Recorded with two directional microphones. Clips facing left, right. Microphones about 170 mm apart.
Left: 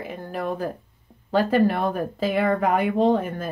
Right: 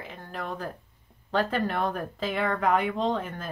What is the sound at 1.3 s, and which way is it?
Speech, 10° left (ahead or behind).